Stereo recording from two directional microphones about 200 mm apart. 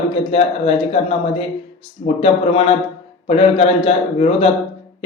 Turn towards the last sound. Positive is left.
turn(degrees=30)  # may be behind; listen again after turning